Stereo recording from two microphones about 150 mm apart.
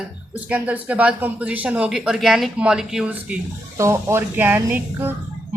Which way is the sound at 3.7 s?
20° right (ahead or behind).